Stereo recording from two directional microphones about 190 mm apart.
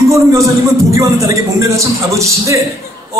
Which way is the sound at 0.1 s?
15° right (ahead or behind).